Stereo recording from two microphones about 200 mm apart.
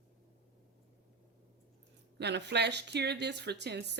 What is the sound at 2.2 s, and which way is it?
Speech, 60° right (ahead or behind).